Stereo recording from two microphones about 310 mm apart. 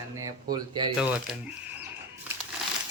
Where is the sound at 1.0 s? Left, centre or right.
Centre.